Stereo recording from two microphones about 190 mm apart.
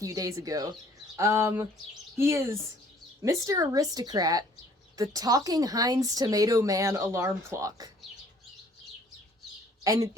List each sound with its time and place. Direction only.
0.0 s a woman's voice: 15° right (ahead or behind)
9.8 s speech: 15° right (ahead or behind)